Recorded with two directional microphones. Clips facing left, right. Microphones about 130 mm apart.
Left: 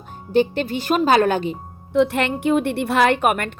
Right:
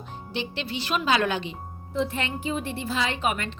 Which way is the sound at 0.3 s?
45° left (ahead or behind).